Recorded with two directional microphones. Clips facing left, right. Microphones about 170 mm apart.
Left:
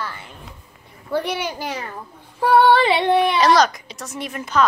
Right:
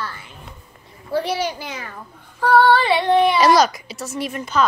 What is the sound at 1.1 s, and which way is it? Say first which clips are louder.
Speech: right 2 dB; 60° left (ahead or behind).